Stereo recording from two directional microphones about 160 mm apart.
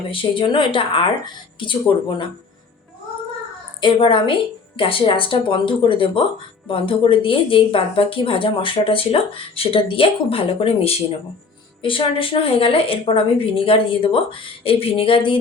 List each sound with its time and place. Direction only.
0.1 s a woman's voice: 30° left (ahead or behind)
3.8 s a woman's voice: 30° left (ahead or behind)